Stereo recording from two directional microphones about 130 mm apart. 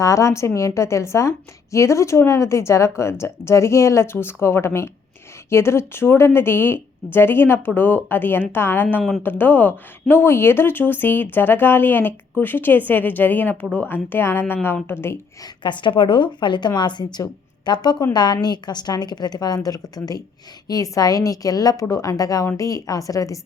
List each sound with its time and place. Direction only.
0.0 s a woman's voice: 25° left (ahead or behind)
9.0 s speech: centre (ahead or behind)
9.2 s a woman's voice: 15° left (ahead or behind)
15.6 s speech: 35° left (ahead or behind)